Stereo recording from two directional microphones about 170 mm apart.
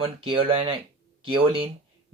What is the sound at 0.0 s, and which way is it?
Speech, 35° right (ahead or behind).